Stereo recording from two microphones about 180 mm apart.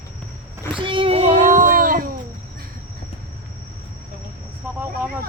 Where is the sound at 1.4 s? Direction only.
50° right (ahead or behind).